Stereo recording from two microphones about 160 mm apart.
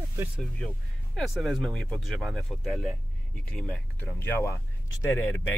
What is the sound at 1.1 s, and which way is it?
Speech, centre (ahead or behind).